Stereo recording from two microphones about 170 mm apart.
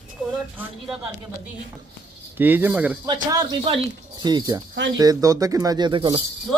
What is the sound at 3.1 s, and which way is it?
Speech, 25° right (ahead or behind).